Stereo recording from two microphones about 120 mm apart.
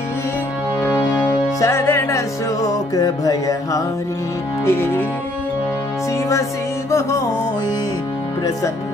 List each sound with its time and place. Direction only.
0.8 s music: 20° left (ahead or behind)
4.6 s music: 20° left (ahead or behind)
6.9 s music: 25° left (ahead or behind)